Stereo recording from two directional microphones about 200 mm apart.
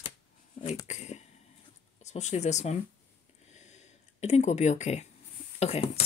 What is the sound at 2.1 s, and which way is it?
Speech, 35° left (ahead or behind).